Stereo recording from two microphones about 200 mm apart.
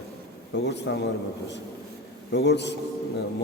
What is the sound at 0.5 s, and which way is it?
Speech, 60° left (ahead or behind).